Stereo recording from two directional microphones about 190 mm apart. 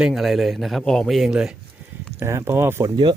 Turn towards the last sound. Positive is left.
turn(degrees=-20)  # may be behind; listen again after turning